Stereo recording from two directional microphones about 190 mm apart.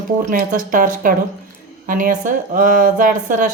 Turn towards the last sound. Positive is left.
turn(degrees=-45)  # may be behind; listen again after turning